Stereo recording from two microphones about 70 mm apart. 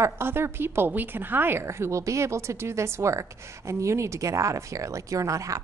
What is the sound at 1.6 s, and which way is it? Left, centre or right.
A woman's voice, right.